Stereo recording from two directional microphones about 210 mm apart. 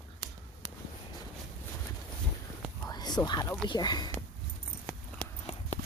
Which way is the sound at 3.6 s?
20° left (ahead or behind).